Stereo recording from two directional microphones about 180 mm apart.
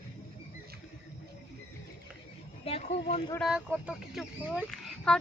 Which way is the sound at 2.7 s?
35° left (ahead or behind).